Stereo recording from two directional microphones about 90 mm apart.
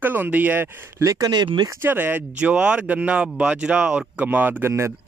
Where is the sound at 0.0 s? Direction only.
20° right (ahead or behind).